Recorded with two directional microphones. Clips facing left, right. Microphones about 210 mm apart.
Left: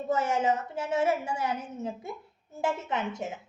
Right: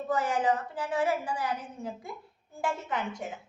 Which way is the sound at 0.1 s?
25° left (ahead or behind).